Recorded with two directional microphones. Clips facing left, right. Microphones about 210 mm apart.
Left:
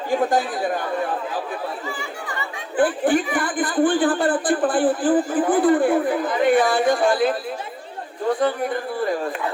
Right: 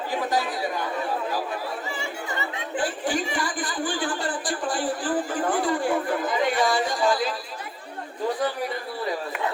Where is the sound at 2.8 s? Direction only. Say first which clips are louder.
Left 9 dB; 55° left (ahead or behind).